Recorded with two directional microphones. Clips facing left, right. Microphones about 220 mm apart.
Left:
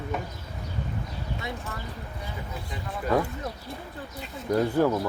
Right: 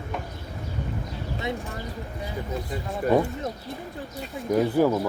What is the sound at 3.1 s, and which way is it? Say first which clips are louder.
Speech: right 4 dB; 25° right (ahead or behind).